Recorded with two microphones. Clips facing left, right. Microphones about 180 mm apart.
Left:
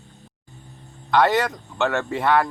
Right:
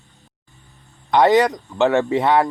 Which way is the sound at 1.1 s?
20° right (ahead or behind).